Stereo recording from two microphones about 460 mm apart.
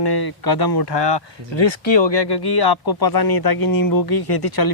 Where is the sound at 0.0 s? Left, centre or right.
Left.